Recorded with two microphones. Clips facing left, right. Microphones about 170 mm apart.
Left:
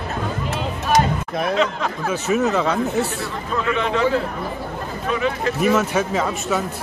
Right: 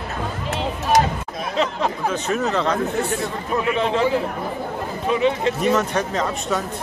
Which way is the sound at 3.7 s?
30° right (ahead or behind).